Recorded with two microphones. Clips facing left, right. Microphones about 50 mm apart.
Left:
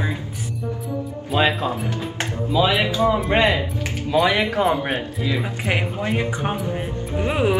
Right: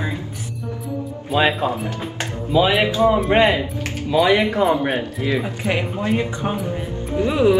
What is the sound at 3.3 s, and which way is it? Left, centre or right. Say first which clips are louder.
Speech: right 1 dB; centre.